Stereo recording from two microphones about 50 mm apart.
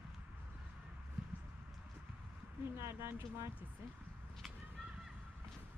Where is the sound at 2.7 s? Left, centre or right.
Right.